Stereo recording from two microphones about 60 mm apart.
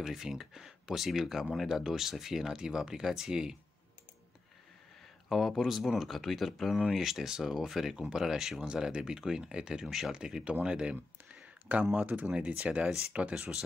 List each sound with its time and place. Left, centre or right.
0.0 s speech: centre
5.3 s speech: centre